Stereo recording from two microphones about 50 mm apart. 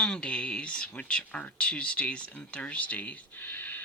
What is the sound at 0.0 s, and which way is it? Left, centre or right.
Speech, centre.